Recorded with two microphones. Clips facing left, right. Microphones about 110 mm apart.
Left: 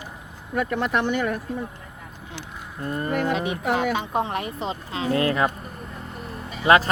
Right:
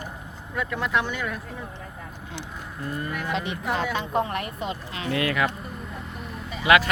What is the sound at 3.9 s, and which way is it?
Speech, 15° left (ahead or behind).